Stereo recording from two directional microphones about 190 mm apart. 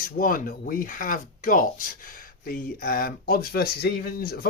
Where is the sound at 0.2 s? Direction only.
45° left (ahead or behind).